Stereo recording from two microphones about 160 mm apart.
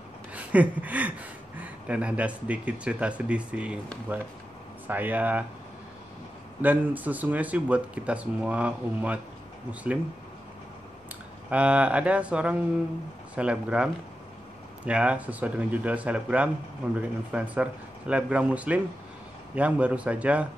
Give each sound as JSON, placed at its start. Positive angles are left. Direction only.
{"t": 0.3, "sound": "a sound", "side_deg": -10}
{"t": 1.6, "sound": "speech", "side_deg": -10}
{"t": 6.6, "sound": "speech", "side_deg": -10}
{"t": 11.5, "sound": "speech", "side_deg": -5}
{"t": 14.9, "sound": "speech", "side_deg": -5}